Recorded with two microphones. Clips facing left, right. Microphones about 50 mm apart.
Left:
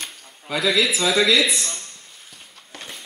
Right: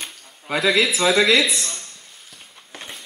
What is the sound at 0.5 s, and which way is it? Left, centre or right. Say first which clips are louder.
Speech: right 2 dB; right.